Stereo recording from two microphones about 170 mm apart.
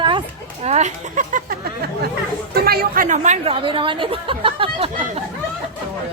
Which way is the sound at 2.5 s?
65° right (ahead or behind).